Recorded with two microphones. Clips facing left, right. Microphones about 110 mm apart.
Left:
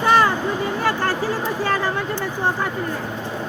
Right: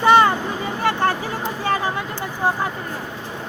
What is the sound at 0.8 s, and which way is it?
Speech, 25° right (ahead or behind).